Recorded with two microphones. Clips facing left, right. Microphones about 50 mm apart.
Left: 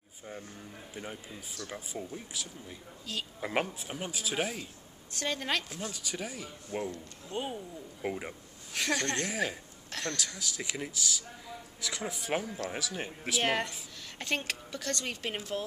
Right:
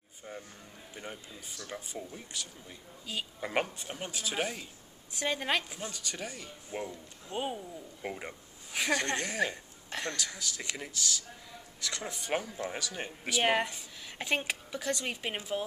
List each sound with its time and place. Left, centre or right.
1.7 s speech: centre
5.1 s speech: centre
6.7 s speech: centre
8.7 s speech: centre
9.8 s a sound: centre
10.1 s speech: centre
13.4 s speech: centre